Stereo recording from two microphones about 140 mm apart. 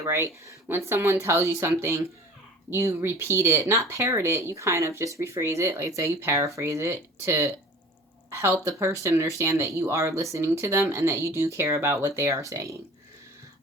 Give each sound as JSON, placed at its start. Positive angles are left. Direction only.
{"t": 0.0, "sound": "a woman's voice", "side_deg": -20}